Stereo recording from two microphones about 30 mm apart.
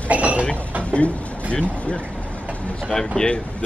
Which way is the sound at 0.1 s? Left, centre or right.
Right.